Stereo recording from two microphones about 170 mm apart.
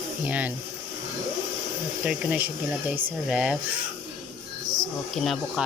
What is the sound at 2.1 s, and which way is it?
Speech, 10° right (ahead or behind).